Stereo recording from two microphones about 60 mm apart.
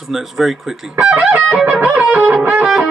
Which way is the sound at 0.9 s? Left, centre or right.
Right.